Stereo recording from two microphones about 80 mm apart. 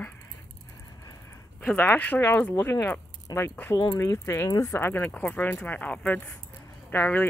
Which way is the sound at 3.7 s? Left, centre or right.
Left.